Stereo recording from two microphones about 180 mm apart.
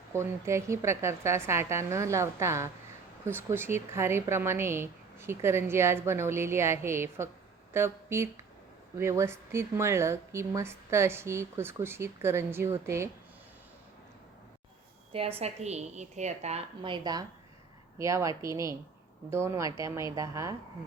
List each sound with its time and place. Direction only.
0.1 s speech: 15° right (ahead or behind)
15.1 s a woman's voice: 35° right (ahead or behind)